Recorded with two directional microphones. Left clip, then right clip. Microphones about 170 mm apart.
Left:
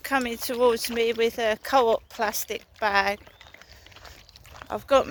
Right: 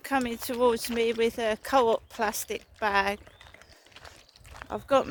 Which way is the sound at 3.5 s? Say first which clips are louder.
Left 4 dB; 15° left (ahead or behind).